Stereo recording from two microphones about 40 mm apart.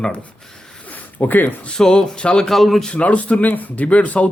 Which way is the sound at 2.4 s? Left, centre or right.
Centre.